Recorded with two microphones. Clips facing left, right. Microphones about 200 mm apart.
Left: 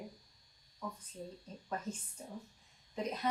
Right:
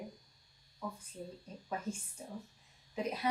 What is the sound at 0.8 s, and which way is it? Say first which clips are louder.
A woman's voice: right 1 dB; 10° right (ahead or behind).